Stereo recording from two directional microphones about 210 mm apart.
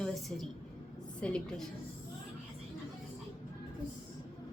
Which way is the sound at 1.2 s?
5° left (ahead or behind).